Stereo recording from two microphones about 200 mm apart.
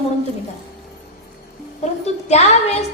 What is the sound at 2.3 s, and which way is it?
Speech, 30° left (ahead or behind).